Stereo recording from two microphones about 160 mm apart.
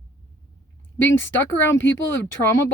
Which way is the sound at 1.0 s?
15° left (ahead or behind).